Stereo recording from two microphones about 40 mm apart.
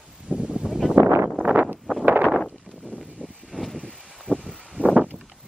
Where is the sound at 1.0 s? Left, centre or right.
Right.